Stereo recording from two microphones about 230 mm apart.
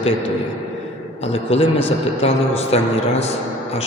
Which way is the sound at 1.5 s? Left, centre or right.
Left.